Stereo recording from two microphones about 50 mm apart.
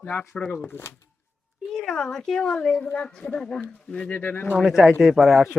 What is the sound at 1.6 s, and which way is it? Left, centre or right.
Speech, centre.